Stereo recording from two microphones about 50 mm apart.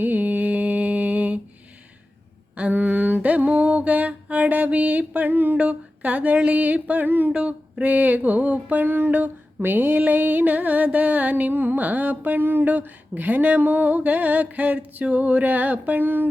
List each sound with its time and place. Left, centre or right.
0.0 s mantra: right
2.7 s music: right
5.5 s a sound: right
7.1 s music: right
7.3 s music: right
11.5 s music: right